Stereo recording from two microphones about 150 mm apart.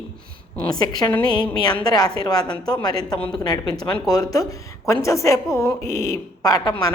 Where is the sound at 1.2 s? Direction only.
30° left (ahead or behind).